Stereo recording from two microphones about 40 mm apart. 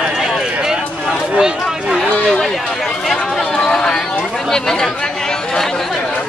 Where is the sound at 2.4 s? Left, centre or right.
Centre.